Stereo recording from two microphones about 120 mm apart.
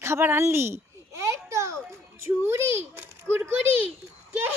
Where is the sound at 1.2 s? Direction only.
25° right (ahead or behind).